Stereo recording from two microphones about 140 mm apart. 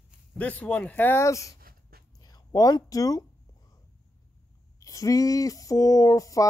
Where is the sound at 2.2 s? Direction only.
25° left (ahead or behind).